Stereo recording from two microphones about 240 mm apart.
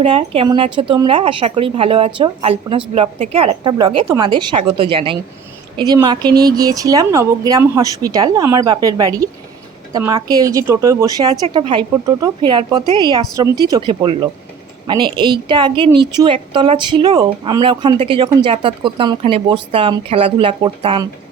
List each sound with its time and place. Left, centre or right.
0.0 s a woman's voice: right